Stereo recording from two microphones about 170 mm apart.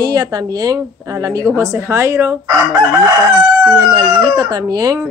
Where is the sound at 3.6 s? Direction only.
20° right (ahead or behind).